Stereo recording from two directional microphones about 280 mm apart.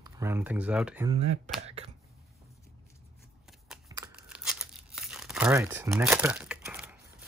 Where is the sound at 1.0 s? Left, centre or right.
Right.